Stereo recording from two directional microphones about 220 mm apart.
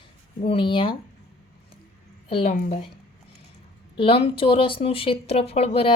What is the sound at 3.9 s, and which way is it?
Speech, 25° left (ahead or behind).